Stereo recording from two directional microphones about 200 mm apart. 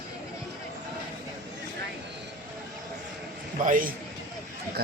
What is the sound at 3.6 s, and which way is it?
Speech, 40° right (ahead or behind).